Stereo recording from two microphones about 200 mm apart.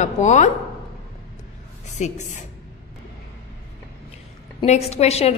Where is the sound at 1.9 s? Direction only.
35° left (ahead or behind).